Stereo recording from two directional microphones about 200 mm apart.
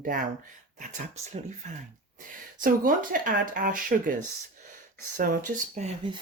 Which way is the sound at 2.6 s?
45° right (ahead or behind).